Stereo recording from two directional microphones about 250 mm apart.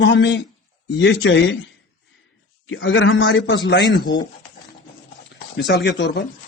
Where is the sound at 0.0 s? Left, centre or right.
Left.